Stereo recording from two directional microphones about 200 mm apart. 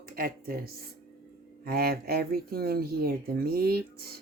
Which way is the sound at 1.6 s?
50° right (ahead or behind).